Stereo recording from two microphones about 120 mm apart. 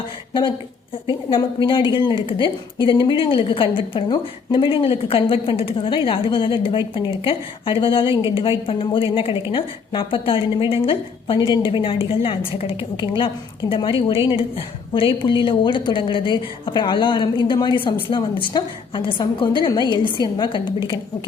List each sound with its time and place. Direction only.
1.5 s a woman's voice: 45° left (ahead or behind)